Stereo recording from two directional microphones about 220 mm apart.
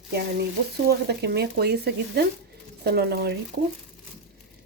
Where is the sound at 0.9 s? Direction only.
50° right (ahead or behind).